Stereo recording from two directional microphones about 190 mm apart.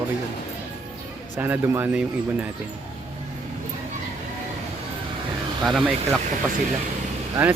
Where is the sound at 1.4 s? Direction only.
10° right (ahead or behind).